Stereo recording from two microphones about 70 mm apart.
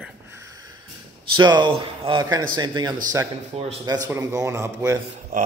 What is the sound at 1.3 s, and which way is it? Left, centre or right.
Speech, right.